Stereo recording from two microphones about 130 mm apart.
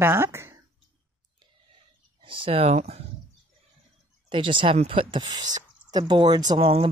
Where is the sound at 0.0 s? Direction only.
20° right (ahead or behind).